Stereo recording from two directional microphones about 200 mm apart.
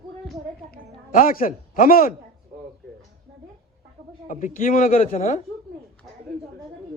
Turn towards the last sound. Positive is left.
turn(degrees=35)  # may be behind; listen again after turning